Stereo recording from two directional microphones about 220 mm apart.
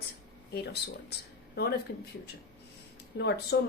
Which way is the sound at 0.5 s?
50° left (ahead or behind).